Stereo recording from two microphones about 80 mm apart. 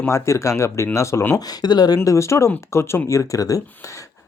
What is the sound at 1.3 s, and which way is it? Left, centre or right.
Speech, left.